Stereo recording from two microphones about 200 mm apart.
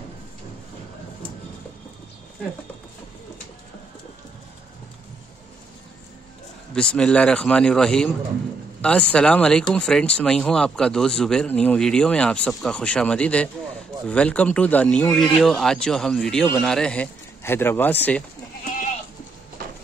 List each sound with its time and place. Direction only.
6.7 s speech: 5° left (ahead or behind)